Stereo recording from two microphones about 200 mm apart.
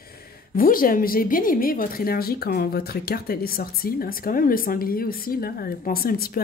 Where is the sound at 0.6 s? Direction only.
45° left (ahead or behind).